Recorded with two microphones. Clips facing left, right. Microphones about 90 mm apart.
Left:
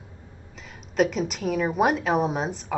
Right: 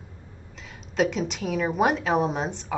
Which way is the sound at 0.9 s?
Centre (ahead or behind).